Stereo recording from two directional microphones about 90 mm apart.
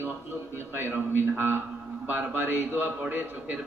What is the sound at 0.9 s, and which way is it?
A man's voice, 20° right (ahead or behind).